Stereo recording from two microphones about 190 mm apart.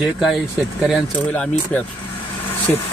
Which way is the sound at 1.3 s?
10° left (ahead or behind).